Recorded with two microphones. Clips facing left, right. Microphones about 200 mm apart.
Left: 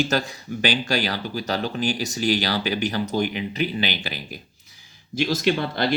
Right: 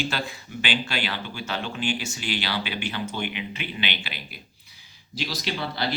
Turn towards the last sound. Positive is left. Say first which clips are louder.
# left 7 dB
turn(degrees=50)  # may be behind; listen again after turning